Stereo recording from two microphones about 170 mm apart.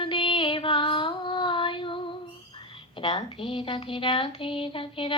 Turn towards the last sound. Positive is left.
turn(degrees=30)  # may be behind; listen again after turning